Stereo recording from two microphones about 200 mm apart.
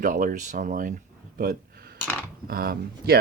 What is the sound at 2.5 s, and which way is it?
Speech, 50° right (ahead or behind).